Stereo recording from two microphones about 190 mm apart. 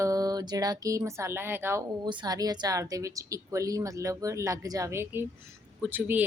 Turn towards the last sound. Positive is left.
turn(degrees=-10)  # may be behind; listen again after turning